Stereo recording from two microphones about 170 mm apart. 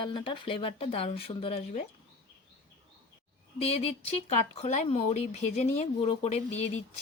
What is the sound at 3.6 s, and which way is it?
Speech, 35° left (ahead or behind).